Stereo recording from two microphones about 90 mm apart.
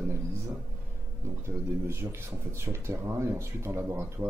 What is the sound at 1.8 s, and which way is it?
Speech, 25° right (ahead or behind).